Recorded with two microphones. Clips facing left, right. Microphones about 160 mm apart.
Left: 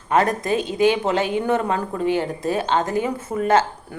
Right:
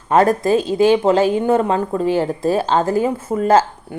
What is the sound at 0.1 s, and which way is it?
A woman's voice, 30° right (ahead or behind).